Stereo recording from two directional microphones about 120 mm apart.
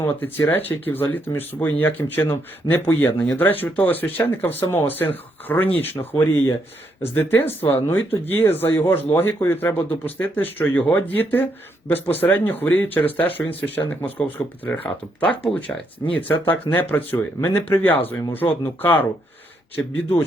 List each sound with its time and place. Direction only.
0.0 s speech: 20° left (ahead or behind)